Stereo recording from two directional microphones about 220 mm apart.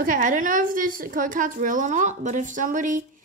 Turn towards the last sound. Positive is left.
turn(degrees=-35)  # may be behind; listen again after turning